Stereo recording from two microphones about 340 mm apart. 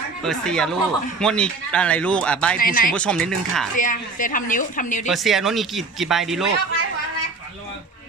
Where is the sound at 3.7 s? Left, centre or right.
Left.